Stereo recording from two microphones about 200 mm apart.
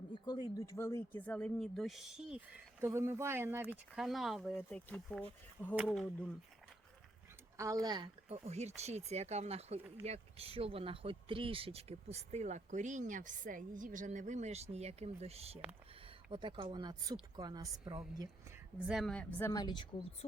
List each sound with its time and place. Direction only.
0.1 s speech: 20° left (ahead or behind); by 2.4 s 5° right (ahead or behind)
2.8 s speech: 15° right (ahead or behind); by 6.3 s 5° left (ahead or behind)
7.5 s a woman's voice: 15° right (ahead or behind)
18.9 s speech: centre (ahead or behind); by 19.9 s 20° left (ahead or behind)